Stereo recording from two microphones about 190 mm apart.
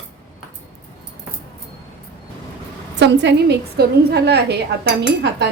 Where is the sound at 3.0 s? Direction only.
60° right (ahead or behind).